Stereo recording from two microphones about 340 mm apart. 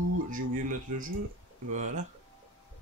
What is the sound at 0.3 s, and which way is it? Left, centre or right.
Speech, right.